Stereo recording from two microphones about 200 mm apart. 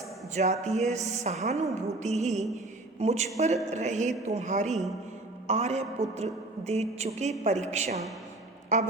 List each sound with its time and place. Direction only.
0.3 s a man's voice: 35° right (ahead or behind)